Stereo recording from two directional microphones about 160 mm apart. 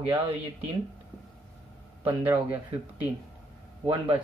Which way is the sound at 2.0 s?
10° right (ahead or behind).